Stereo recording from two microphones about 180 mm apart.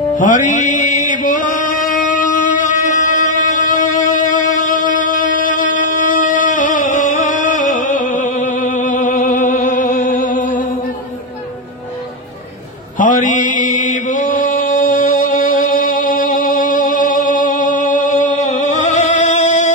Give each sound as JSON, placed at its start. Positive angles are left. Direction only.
{"t": 0.2, "sound": "music", "side_deg": 45}
{"t": 13.0, "sound": "chant", "side_deg": 45}